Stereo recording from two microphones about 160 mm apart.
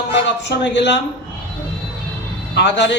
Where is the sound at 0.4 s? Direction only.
90° left.